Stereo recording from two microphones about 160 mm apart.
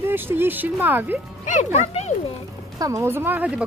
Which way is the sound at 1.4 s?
50° left (ahead or behind).